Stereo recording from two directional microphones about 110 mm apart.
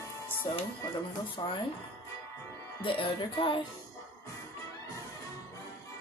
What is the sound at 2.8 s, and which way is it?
Music, 50° left (ahead or behind).